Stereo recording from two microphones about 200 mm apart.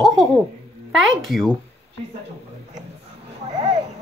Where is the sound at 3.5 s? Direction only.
35° right (ahead or behind).